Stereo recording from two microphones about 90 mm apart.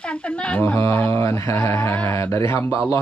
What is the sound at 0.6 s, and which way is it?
Speech, 25° left (ahead or behind).